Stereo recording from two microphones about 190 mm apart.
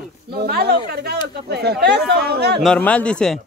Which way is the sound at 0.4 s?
55° right (ahead or behind).